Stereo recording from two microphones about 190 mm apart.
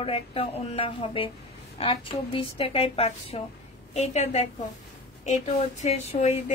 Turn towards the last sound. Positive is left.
turn(degrees=35)  # may be behind; listen again after turning